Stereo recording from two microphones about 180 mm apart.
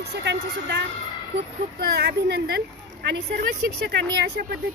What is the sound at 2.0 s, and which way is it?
Speech, 65° right (ahead or behind).